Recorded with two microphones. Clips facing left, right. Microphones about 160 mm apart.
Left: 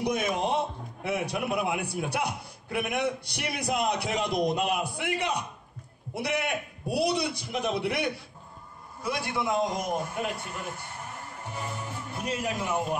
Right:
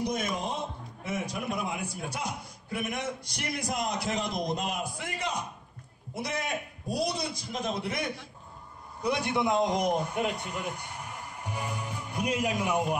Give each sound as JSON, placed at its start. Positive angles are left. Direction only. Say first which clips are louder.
{"t": 0.0, "sound": "music", "louder": "left 3 dB", "side_deg": 65}
{"t": 1.0, "sound": "a man's voice", "louder": "left 4 dB", "side_deg": 65}
{"t": 9.0, "sound": "a man's voice", "louder": "right 2 dB", "side_deg": -20}